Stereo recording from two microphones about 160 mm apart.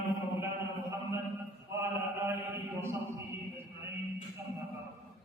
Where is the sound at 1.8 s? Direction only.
15° right (ahead or behind).